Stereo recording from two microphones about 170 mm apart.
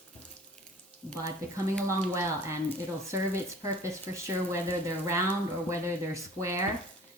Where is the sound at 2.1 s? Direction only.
15° right (ahead or behind).